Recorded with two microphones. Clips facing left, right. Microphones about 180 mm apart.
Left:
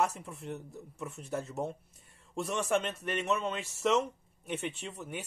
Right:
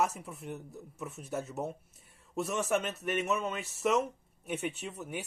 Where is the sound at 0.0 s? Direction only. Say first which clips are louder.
Even; centre (ahead or behind).